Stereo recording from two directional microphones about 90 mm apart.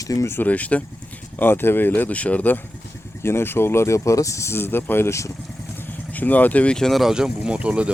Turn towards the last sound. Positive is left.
turn(degrees=-15)  # may be behind; listen again after turning